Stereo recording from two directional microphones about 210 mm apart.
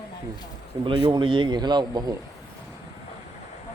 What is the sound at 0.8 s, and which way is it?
A man's voice, 20° right (ahead or behind).